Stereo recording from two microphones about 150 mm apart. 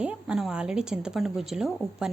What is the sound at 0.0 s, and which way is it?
Speech, 5° right (ahead or behind).